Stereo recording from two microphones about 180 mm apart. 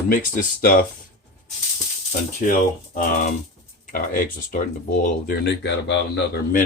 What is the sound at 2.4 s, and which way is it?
Speech, 45° left (ahead or behind).